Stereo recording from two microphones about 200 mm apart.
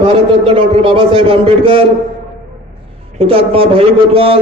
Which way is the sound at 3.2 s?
30° right (ahead or behind).